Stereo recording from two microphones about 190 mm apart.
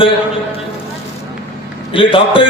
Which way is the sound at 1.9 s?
30° left (ahead or behind).